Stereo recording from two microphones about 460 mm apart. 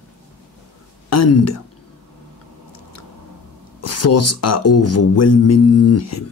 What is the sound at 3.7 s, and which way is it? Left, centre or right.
A man's voice, left.